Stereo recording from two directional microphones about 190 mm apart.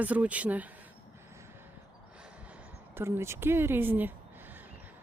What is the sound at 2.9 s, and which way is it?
Speech, 10° right (ahead or behind).